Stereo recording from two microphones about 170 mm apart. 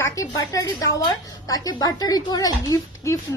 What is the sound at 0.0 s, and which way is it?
A woman's voice, 20° left (ahead or behind).